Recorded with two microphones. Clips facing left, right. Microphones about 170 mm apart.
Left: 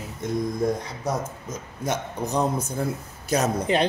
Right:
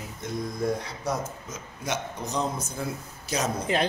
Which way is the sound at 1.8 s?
55° left (ahead or behind).